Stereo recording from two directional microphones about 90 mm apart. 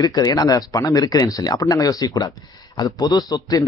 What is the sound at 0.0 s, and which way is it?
A man's voice, 45° left (ahead or behind).